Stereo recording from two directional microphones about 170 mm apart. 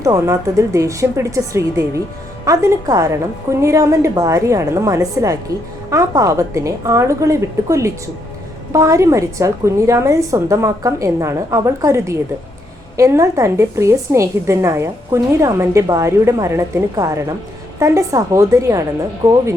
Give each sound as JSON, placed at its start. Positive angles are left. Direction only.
{"t": 0.0, "sound": "a woman's voice", "side_deg": -20}